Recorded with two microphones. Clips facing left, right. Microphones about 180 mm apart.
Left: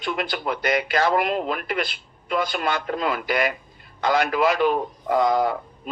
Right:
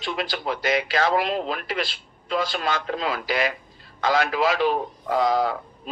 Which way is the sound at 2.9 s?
50° left (ahead or behind).